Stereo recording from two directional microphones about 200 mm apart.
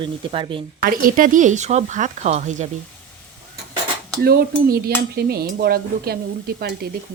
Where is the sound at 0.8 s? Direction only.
45° right (ahead or behind).